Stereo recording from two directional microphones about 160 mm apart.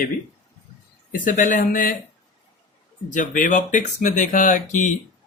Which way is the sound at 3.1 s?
55° left (ahead or behind).